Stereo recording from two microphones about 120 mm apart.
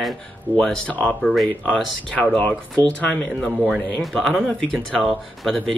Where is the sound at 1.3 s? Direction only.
Centre (ahead or behind).